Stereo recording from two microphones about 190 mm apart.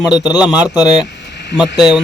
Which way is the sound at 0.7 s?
20° left (ahead or behind).